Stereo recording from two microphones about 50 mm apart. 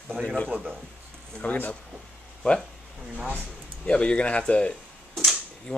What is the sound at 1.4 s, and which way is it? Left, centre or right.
Speech, left.